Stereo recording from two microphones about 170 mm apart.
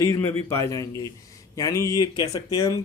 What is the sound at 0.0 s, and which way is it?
Speech, 15° left (ahead or behind).